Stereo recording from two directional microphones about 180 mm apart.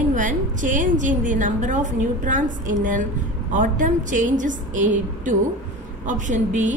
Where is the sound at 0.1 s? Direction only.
45° right (ahead or behind).